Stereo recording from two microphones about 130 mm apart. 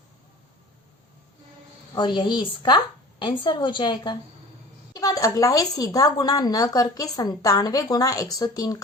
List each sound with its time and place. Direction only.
2.0 s a woman's voice: 35° left (ahead or behind)